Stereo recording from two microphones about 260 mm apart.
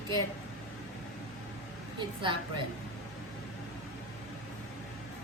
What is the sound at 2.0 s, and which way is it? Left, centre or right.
Speech, centre.